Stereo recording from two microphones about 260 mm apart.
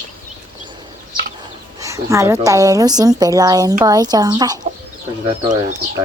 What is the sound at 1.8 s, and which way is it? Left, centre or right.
Speech, centre.